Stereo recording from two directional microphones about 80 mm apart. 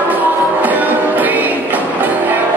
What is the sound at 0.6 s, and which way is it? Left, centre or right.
Music, right.